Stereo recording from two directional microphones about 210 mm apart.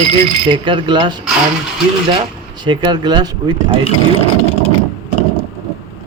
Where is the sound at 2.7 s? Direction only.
20° right (ahead or behind).